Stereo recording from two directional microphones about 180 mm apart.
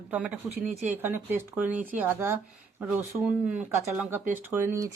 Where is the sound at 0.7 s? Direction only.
40° right (ahead or behind).